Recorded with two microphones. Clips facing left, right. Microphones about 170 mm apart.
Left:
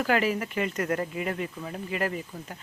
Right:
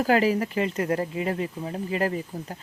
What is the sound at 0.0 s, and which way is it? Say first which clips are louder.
A woman's voice: right 4 dB; 35° right (ahead or behind).